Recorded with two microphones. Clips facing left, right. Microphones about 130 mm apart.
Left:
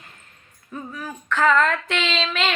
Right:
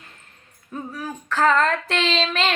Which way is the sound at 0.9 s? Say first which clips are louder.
Even; 35° right (ahead or behind).